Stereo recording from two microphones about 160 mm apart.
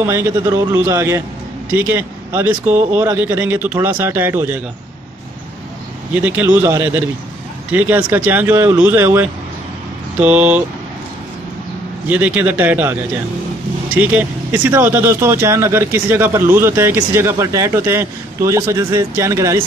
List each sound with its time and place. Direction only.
0.0 s speech: 20° right (ahead or behind)
6.1 s speech: 10° right (ahead or behind)
12.1 s speech: 10° right (ahead or behind)
13.9 s speech: 10° right (ahead or behind)